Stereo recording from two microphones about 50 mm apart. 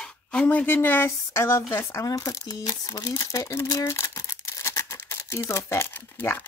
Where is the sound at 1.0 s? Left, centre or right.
Left.